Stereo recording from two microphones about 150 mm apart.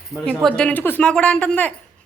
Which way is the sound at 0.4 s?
5° left (ahead or behind).